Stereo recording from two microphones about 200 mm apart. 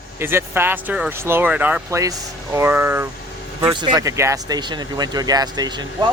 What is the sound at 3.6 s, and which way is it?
Speech, 20° right (ahead or behind).